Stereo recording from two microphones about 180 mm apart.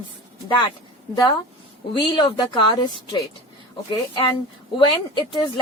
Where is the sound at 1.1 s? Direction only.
25° left (ahead or behind).